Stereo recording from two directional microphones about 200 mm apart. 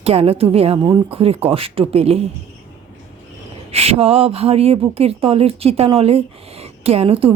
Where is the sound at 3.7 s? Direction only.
30° right (ahead or behind).